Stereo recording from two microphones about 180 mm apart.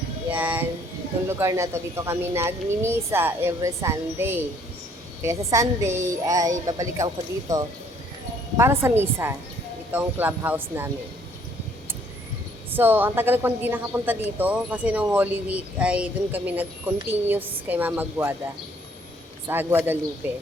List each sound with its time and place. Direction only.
0.3 s music: 10° right (ahead or behind)
1.3 s a woman's voice: 15° right (ahead or behind)
8.5 s a woman's voice: 15° right (ahead or behind)
12.7 s a woman's voice: 10° right (ahead or behind)
19.5 s a woman's voice: 10° right (ahead or behind)